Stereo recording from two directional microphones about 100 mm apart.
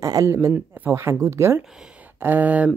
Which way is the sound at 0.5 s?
20° right (ahead or behind).